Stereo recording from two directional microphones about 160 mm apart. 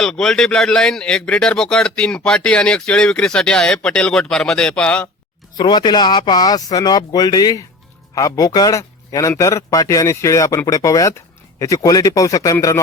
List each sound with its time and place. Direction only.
0.0 s a man's voice: 5° left (ahead or behind)
5.5 s a man's voice: 25° left (ahead or behind)